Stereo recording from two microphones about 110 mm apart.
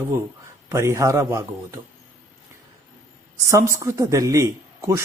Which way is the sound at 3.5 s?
30° right (ahead or behind).